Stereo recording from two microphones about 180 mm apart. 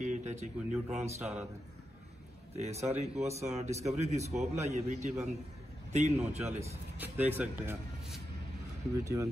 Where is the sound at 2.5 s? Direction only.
35° right (ahead or behind).